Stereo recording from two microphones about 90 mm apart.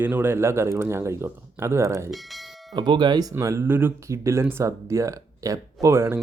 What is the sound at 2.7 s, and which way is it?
Speech, 55° right (ahead or behind).